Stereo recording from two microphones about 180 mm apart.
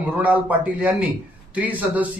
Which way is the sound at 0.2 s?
10° right (ahead or behind).